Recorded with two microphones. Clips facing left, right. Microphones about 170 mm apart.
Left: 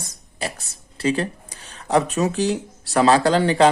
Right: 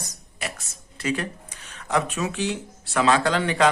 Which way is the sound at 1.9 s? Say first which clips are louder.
Left 6 dB; 35° left (ahead or behind).